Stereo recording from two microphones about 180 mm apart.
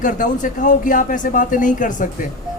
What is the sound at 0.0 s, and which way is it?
A man's voice, 45° left (ahead or behind).